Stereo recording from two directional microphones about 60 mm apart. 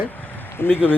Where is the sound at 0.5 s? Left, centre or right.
Left.